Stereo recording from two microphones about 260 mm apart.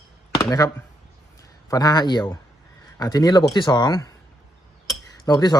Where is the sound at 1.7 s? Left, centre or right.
Centre.